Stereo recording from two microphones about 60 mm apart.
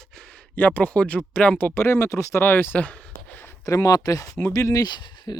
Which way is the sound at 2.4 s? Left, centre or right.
Left.